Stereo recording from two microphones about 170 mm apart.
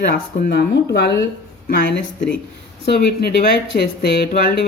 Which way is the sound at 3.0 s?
75° left (ahead or behind).